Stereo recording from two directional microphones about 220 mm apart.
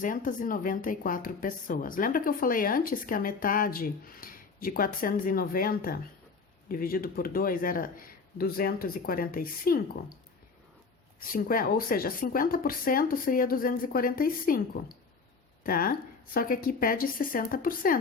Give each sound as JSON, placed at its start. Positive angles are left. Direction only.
{"t": 0.0, "sound": "speech", "side_deg": 35}
{"t": 11.2, "sound": "speech", "side_deg": 40}